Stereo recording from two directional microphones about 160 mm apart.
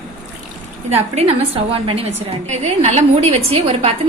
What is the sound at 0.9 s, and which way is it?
A woman's voice, 40° right (ahead or behind).